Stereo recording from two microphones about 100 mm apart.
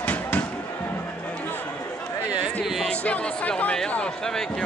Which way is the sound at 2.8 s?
15° left (ahead or behind).